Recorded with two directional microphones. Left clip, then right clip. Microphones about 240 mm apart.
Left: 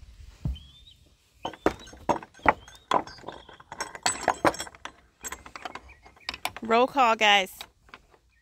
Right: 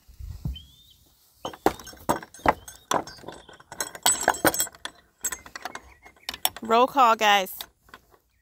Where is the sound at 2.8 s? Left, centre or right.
Right.